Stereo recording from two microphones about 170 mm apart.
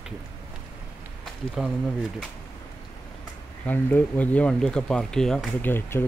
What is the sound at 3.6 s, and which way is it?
Speech, 10° left (ahead or behind).